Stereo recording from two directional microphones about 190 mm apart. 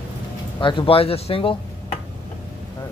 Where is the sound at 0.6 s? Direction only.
25° left (ahead or behind).